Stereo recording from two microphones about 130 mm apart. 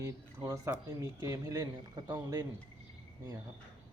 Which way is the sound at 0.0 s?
25° right (ahead or behind).